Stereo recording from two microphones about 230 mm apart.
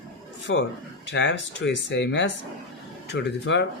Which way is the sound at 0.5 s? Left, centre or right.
Left.